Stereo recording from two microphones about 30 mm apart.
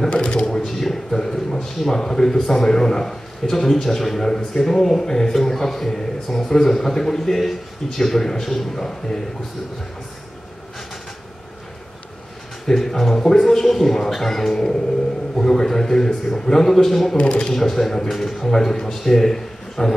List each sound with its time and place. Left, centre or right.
0.1 s speech: left
0.7 s a man's voice: centre
12.6 s a man's voice: centre
14.1 s music: centre
15.3 s a man's voice: centre
17.2 s speech: left
17.6 s a man's voice: centre